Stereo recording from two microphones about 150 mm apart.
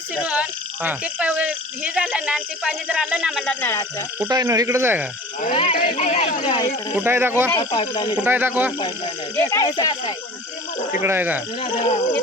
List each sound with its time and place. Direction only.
0.2 s speech: 10° right (ahead or behind); by 3.8 s 15° left (ahead or behind)
4.3 s speech: 25° right (ahead or behind)
5.5 s speech: 35° left (ahead or behind)
6.9 s speech: 15° right (ahead or behind)
7.6 s speech: 30° left (ahead or behind)
8.1 s speech: 10° right (ahead or behind)
9.5 s speech: 25° left (ahead or behind)
11.0 s speech: 15° right (ahead or behind)
11.6 s speech: 45° left (ahead or behind)